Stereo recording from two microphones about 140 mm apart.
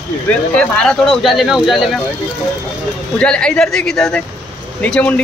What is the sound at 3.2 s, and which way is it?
Speech, 5° left (ahead or behind).